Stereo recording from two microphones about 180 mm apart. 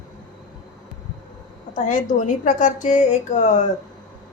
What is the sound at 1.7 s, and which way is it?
A woman's voice, 45° left (ahead or behind).